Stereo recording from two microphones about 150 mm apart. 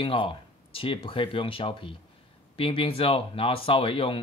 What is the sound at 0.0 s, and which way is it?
Speech, 35° left (ahead or behind).